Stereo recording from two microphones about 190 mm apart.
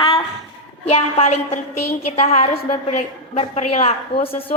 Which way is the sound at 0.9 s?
35° left (ahead or behind).